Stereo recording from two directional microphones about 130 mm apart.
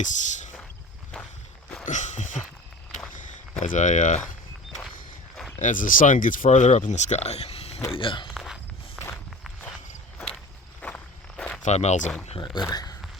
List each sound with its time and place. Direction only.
0.0 s speech: 70° left (ahead or behind)
1.8 s a sound: 70° left (ahead or behind)
3.6 s speech: 70° left (ahead or behind)
5.5 s speech: 85° left; by 8.3 s 40° left (ahead or behind)
8.3 s walk: centre (ahead or behind)
10.8 s walk: 10° left (ahead or behind)
11.6 s speech: 60° left (ahead or behind)
12.6 s speech: 30° left (ahead or behind)